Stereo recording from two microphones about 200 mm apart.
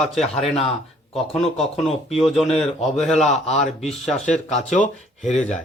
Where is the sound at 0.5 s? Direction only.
30° left (ahead or behind).